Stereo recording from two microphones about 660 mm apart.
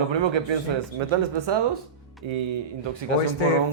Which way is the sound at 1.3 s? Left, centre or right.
Right.